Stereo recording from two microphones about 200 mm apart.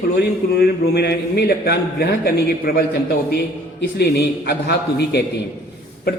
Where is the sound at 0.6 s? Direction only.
55° left (ahead or behind).